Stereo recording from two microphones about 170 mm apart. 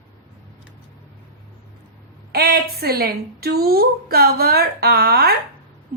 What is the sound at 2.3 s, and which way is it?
A woman's voice, 65° right (ahead or behind).